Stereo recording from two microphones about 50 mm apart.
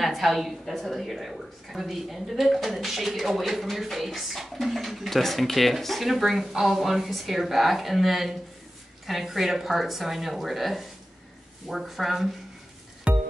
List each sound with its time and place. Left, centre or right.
0.0 s a woman's voice: centre
13.1 s music: right